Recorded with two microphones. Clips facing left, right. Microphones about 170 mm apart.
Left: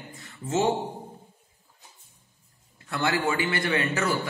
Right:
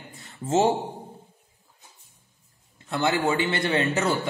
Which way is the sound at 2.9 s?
20° right (ahead or behind).